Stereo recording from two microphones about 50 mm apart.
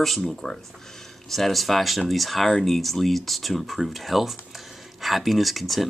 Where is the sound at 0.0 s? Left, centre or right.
Centre.